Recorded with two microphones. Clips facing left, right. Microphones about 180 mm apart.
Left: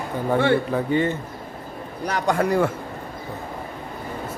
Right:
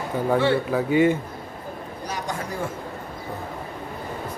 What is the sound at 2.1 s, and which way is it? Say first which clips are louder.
Speech: left 10 dB; 65° left (ahead or behind).